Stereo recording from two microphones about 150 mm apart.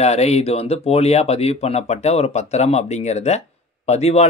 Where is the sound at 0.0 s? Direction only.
45° left (ahead or behind).